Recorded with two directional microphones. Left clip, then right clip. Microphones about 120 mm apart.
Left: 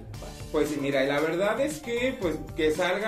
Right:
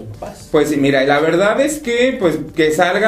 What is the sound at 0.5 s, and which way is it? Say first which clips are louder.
A man's voice: right 13 dB; 40° right (ahead or behind).